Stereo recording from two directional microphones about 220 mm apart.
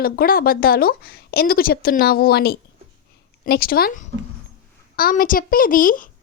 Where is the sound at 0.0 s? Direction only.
40° left (ahead or behind).